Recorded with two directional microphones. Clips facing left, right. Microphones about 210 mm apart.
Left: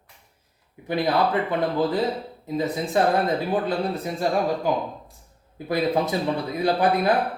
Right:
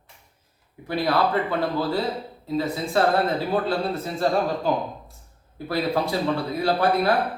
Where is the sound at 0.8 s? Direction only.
20° left (ahead or behind).